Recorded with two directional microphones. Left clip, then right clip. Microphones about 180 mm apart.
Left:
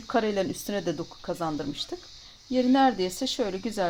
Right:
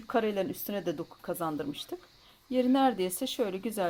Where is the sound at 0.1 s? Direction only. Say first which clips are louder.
Left 3 dB; 10° right (ahead or behind).